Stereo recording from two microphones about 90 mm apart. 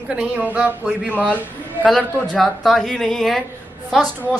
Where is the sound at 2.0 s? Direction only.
10° left (ahead or behind).